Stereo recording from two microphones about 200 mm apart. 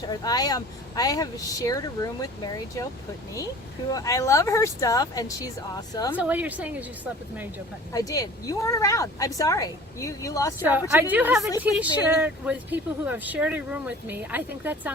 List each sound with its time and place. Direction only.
0.1 s speech: 20° left (ahead or behind)
3.9 s speech: 15° left (ahead or behind)
6.1 s speech: 10° right (ahead or behind)
7.9 s speech: 15° left (ahead or behind)
10.6 s speech: 10° right (ahead or behind)